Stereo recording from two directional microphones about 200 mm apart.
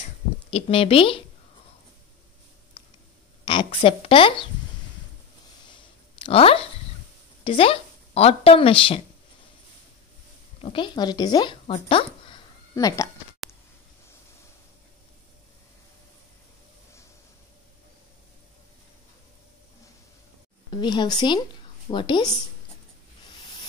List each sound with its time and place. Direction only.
0.5 s speech: 30° left (ahead or behind)
3.4 s a woman's voice: 25° left (ahead or behind)
5.7 s a sound: 25° left (ahead or behind)
7.4 s speech: 30° left (ahead or behind)
10.6 s speech: 25° left (ahead or behind)
12.7 s speech: 15° left (ahead or behind)
20.7 s speech: 20° left (ahead or behind)